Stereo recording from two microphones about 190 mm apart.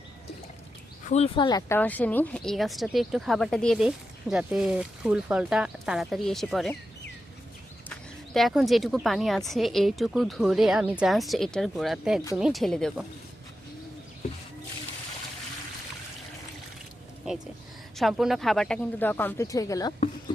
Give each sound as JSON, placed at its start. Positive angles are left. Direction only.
{"t": 1.0, "sound": "speech", "side_deg": 35}
{"t": 1.5, "sound": "speech", "side_deg": 15}
{"t": 7.9, "sound": "speech", "side_deg": 0}
{"t": 17.9, "sound": "speech", "side_deg": 0}